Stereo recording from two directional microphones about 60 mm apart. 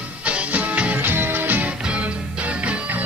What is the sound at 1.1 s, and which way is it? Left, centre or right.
Music, right.